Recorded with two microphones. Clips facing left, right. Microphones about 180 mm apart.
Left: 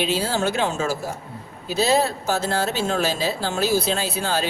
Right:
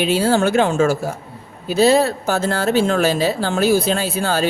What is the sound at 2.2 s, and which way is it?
Speech, 55° right (ahead or behind).